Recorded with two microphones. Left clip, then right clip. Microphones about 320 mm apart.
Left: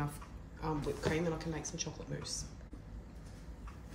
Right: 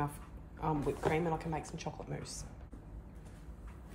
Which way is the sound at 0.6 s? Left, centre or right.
Centre.